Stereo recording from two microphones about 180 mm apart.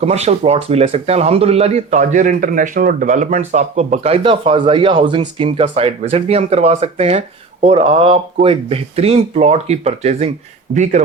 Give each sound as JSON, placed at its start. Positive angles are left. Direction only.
{"t": 0.0, "sound": "speech", "side_deg": -35}